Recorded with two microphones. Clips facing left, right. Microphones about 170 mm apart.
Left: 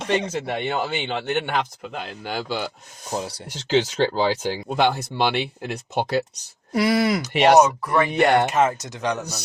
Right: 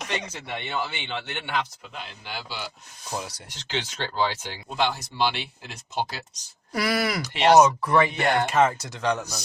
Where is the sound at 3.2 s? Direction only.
25° left (ahead or behind); by 6.2 s 60° left (ahead or behind).